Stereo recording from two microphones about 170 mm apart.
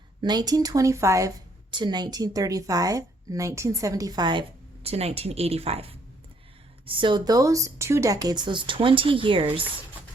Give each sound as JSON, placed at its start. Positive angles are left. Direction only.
{"t": 0.2, "sound": "speech", "side_deg": -25}